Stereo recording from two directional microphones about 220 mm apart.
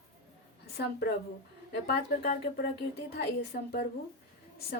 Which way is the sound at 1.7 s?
45° left (ahead or behind).